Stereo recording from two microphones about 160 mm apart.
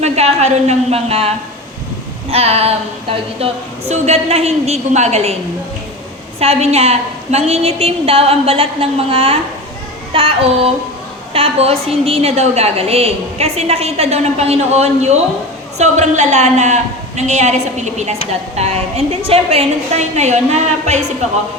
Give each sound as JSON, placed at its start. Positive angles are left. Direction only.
{"t": 0.0, "sound": "a woman's voice", "side_deg": -45}
{"t": 2.3, "sound": "a woman's voice", "side_deg": -40}
{"t": 6.4, "sound": "a woman's voice", "side_deg": -40}
{"t": 10.1, "sound": "child singing", "side_deg": -35}
{"t": 11.3, "sound": "a woman's voice", "side_deg": -35}